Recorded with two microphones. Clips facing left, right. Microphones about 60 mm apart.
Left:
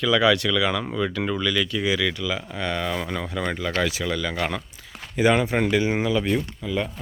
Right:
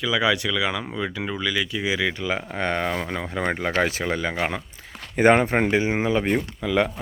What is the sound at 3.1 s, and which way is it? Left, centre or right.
Speech, right.